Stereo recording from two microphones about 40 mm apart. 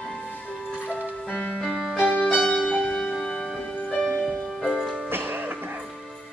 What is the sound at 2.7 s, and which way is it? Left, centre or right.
Music, left.